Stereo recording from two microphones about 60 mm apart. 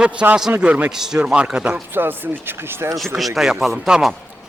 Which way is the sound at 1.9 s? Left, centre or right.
Right.